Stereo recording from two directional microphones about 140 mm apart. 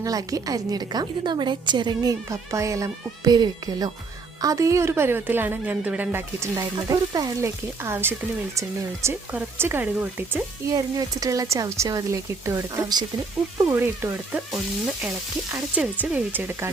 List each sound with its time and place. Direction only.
0.0 s a woman's voice: 25° right (ahead or behind)
6.6 s a woman's voice: 25° right (ahead or behind)
10.7 s a woman's voice: 25° right (ahead or behind)
13.7 s speech: 15° right (ahead or behind)
15.5 s speech: 10° right (ahead or behind)